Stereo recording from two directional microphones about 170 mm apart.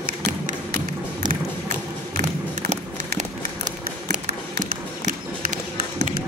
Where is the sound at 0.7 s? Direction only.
55° right (ahead or behind).